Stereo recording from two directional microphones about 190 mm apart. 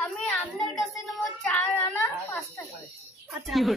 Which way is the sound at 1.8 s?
15° left (ahead or behind).